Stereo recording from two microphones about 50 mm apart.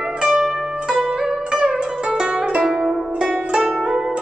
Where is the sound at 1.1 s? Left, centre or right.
Centre.